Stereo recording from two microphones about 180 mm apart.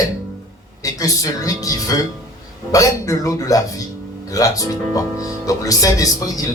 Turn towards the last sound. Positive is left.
turn(degrees=20)  # may be behind; listen again after turning